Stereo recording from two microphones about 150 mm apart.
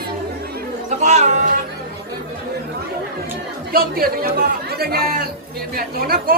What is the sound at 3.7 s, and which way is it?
Chatter, 85° right.